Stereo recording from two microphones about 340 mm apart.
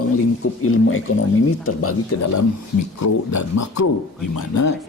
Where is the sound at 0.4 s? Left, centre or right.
Left.